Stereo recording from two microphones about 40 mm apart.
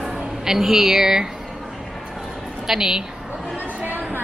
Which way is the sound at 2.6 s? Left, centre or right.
Centre.